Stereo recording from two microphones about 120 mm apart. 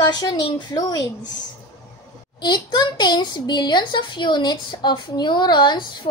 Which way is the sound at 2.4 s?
40° left (ahead or behind).